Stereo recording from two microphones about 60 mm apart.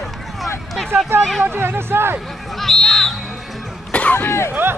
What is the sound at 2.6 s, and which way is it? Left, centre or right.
Music, centre.